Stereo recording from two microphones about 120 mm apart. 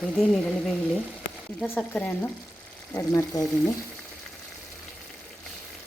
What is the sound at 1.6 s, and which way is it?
Speech, 5° left (ahead or behind).